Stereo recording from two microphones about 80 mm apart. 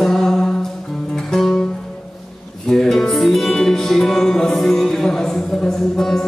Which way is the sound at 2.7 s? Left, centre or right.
Centre.